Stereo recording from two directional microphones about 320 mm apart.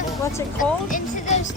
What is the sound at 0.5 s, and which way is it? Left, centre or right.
Speech, left.